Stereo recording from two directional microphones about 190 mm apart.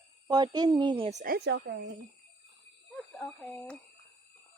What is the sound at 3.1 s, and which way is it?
Speech, 5° left (ahead or behind).